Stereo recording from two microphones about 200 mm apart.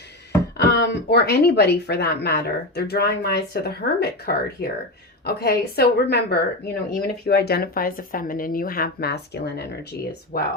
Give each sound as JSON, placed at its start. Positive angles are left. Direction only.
{"t": 0.7, "sound": "speech", "side_deg": 55}